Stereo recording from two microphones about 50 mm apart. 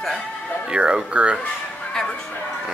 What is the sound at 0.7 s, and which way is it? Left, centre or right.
Speech, centre.